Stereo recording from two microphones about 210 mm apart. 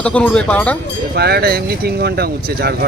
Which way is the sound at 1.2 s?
50° right (ahead or behind).